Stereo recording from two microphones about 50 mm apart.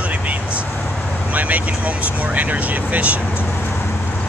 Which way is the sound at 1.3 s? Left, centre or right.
Right.